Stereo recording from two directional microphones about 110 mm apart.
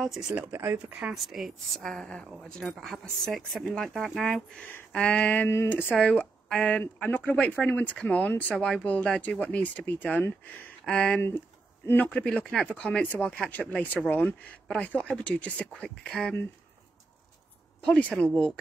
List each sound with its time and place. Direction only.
0.0 s a woman's voice: centre (ahead or behind)
0.3 s speech: 25° right (ahead or behind)
1.1 s a woman's voice: centre (ahead or behind); by 12.1 s 20° left (ahead or behind)
12.1 s a woman's voice: 10° left (ahead or behind)
17.8 s a woman's voice: 10° left (ahead or behind)